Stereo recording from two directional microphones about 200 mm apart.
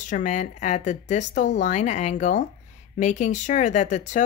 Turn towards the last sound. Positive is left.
turn(degrees=40)  # may be behind; listen again after turning